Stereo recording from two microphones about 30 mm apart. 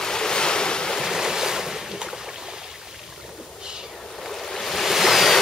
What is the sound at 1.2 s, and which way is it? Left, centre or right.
Waves, centre.